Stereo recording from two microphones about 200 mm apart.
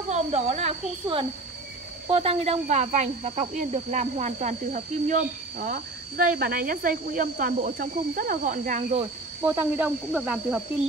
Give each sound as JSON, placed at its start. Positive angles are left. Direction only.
{"t": 0.1, "sound": "speech", "side_deg": -35}
{"t": 9.4, "sound": "speech", "side_deg": -10}